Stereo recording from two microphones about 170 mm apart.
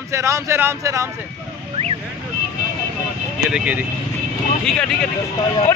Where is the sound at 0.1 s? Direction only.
15° right (ahead or behind).